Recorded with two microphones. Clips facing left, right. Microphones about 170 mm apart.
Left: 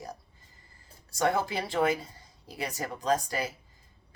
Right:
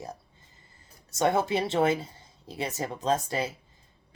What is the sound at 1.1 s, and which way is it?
Speech, 20° right (ahead or behind).